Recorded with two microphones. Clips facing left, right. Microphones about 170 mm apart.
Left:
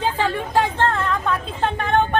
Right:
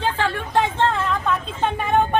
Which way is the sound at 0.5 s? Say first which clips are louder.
Right 1 dB; centre (ahead or behind).